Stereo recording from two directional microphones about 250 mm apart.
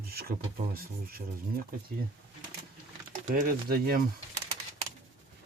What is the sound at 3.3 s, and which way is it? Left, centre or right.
Speech, right.